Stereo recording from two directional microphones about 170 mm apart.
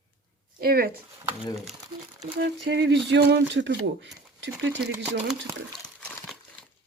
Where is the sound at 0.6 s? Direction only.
60° right (ahead or behind).